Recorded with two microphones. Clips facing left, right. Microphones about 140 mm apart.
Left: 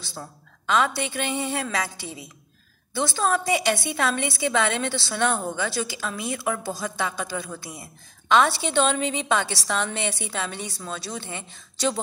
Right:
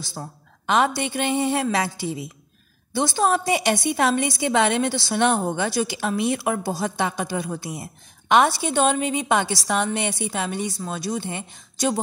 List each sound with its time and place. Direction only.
0.1 s a woman's voice: 20° right (ahead or behind)
2.9 s a woman's voice: 20° right (ahead or behind)